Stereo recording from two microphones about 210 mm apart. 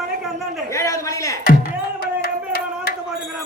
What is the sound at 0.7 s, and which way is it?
Speech, 15° left (ahead or behind).